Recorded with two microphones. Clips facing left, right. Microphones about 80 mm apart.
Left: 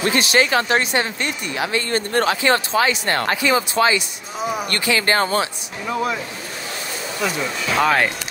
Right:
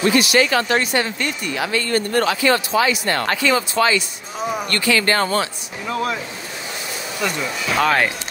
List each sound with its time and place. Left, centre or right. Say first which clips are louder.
0.0 s speech: right 2 dB; left
3.3 s speech: even; centre
4.4 s speech: even; centre
4.6 s speech: right 2 dB; left
5.9 s speech: even; centre
7.2 s speech: even; centre